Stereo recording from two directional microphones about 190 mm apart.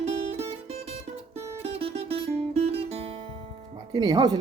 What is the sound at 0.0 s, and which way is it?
Music, 30° right (ahead or behind).